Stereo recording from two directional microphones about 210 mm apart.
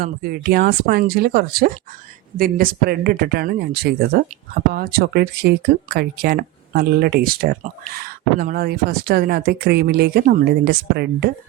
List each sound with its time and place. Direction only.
0.0 s speech: 45° right (ahead or behind)